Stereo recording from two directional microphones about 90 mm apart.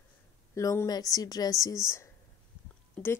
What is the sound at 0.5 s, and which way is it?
Speech, 35° left (ahead or behind).